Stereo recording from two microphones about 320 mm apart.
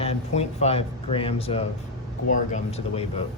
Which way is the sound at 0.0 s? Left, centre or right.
Centre.